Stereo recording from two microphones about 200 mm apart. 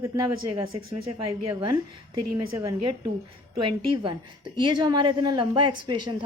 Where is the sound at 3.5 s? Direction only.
25° right (ahead or behind).